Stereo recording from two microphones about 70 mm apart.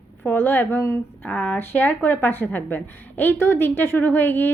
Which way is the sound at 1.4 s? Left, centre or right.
Left.